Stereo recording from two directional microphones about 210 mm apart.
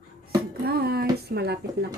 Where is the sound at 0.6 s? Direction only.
50° right (ahead or behind).